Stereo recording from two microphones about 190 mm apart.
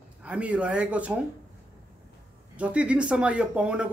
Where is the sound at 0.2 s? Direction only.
5° right (ahead or behind).